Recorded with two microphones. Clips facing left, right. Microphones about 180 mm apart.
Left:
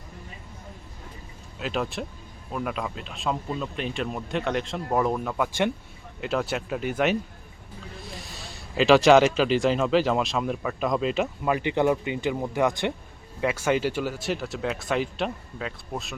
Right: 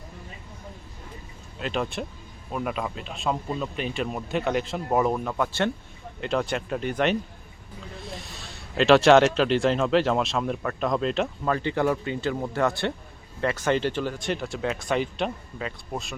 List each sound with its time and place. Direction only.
1.5 s speech: centre (ahead or behind)
5.4 s speech: 15° left (ahead or behind)
8.7 s speech: centre (ahead or behind)